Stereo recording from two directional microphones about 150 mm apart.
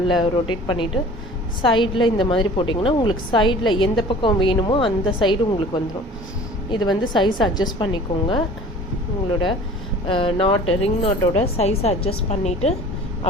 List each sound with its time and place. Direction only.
0.2 s a woman's voice: 35° left (ahead or behind)
10.1 s speech: 35° left (ahead or behind)